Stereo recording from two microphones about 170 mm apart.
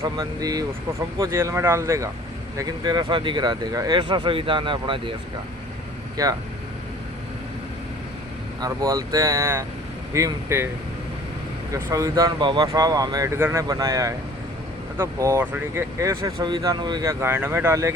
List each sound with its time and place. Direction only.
0.0 s speech: 20° right (ahead or behind)
6.2 s speech: 20° right (ahead or behind)
8.6 s speech: 20° right (ahead or behind)
11.7 s speech: 20° right (ahead or behind)